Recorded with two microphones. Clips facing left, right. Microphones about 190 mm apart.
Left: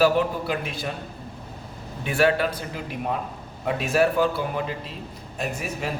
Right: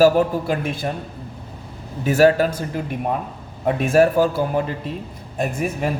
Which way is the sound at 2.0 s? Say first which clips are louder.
Right 6 dB; 40° right (ahead or behind).